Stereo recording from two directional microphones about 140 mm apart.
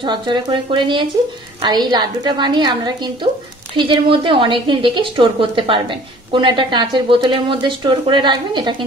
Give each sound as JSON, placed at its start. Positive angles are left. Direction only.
{"t": 0.0, "sound": "speech", "side_deg": -35}